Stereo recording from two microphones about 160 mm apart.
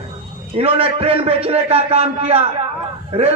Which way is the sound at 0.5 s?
35° right (ahead or behind).